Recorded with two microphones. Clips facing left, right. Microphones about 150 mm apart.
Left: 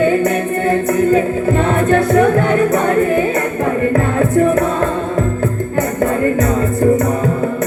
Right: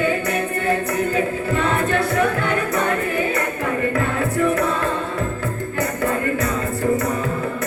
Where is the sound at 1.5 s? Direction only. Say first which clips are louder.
Left 6 dB; 45° left (ahead or behind).